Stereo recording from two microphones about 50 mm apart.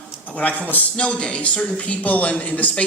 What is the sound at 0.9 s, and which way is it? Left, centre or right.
A man's voice, left.